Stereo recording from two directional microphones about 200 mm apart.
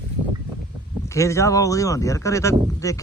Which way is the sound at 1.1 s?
15° left (ahead or behind).